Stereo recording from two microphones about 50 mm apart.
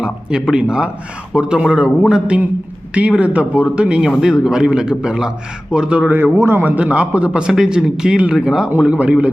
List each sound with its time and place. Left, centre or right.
0.0 s a man's voice: centre
6.1 s a man's voice: right
6.6 s a man's voice: right
6.8 s a man's voice: right
8.8 s a man's voice: right